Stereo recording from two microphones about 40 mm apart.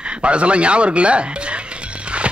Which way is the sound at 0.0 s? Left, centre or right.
Right.